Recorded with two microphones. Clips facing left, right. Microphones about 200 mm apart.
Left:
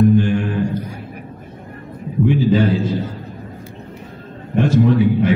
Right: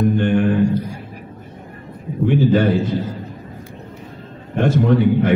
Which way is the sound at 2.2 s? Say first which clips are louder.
Right 1 dB; 60° right (ahead or behind).